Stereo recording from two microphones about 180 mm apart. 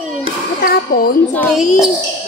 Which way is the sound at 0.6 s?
55° left (ahead or behind).